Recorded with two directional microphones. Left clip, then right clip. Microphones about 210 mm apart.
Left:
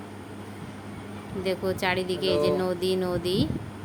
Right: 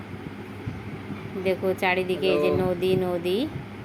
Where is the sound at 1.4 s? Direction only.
15° left (ahead or behind).